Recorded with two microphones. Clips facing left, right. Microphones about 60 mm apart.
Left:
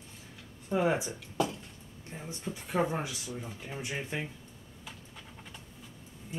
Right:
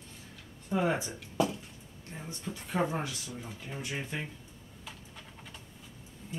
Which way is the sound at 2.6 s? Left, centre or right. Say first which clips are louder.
Left 1 dB; centre.